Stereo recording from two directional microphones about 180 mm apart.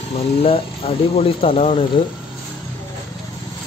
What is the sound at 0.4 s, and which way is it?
Speech, 30° left (ahead or behind).